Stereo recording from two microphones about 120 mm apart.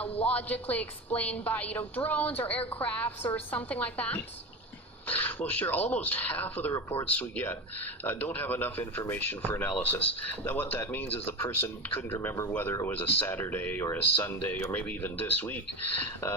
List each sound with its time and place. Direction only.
0.1 s a woman's voice: 55° left (ahead or behind)
0.3 s a woman's voice: 15° left (ahead or behind)